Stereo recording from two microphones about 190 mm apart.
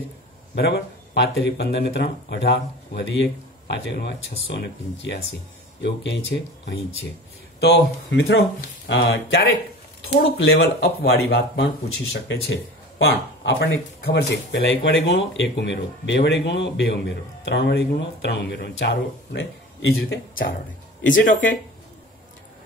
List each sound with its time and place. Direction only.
0.6 s speech: 65° left (ahead or behind); by 8.5 s 85° left
8.8 s speech: 60° left (ahead or behind)
11.1 s speech: 60° left (ahead or behind)
21.1 s speech: 45° left (ahead or behind)